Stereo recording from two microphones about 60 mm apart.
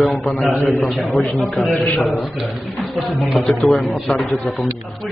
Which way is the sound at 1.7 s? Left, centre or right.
Left.